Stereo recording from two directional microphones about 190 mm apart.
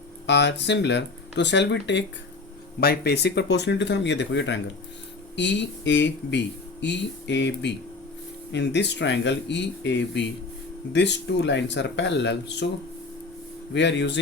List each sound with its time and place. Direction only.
0.3 s speech: 65° left (ahead or behind)
2.8 s speech: 55° left (ahead or behind)
13.7 s speech: 65° left (ahead or behind)